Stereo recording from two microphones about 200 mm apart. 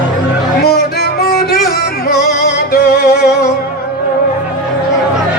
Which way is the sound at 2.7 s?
50° left (ahead or behind).